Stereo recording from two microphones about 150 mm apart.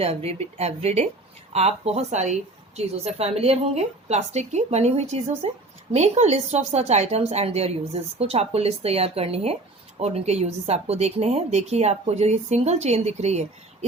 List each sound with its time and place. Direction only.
0.0 s a woman's voice: 40° right (ahead or behind)